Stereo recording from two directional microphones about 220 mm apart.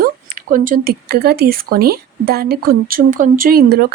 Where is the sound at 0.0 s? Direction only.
40° right (ahead or behind).